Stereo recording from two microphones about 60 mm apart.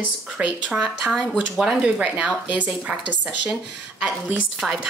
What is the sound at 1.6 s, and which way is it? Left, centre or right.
Speech, centre.